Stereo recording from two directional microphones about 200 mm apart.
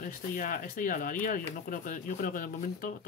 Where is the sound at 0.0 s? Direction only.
45° left (ahead or behind).